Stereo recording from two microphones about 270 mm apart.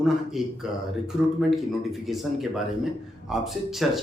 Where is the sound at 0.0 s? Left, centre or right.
Centre.